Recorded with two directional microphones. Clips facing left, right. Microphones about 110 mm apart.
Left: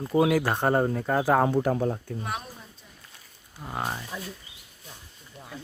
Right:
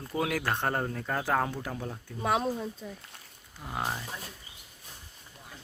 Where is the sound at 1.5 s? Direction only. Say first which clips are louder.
Left 12 dB; 45° left (ahead or behind).